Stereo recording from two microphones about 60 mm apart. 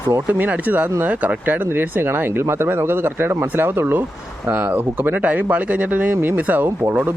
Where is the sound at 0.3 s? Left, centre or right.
Right.